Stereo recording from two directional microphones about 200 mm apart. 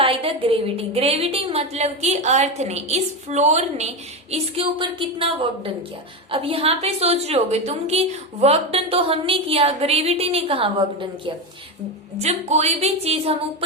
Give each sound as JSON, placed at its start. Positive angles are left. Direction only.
{"t": 0.0, "sound": "a woman's voice", "side_deg": -30}
{"t": 12.2, "sound": "a woman's voice", "side_deg": -35}